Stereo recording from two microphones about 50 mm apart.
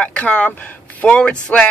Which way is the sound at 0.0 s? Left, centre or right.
Left.